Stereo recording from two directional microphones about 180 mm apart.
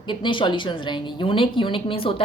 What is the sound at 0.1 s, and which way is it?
A woman's voice, 25° left (ahead or behind).